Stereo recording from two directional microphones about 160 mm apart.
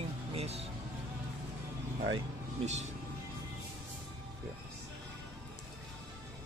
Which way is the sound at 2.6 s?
45° right (ahead or behind).